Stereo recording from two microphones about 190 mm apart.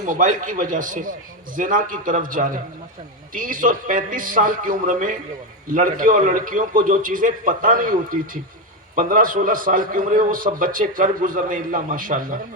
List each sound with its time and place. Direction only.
0.0 s a man's voice: 45° right (ahead or behind)